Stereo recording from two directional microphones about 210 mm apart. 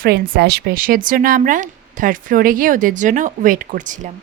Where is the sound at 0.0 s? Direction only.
50° right (ahead or behind).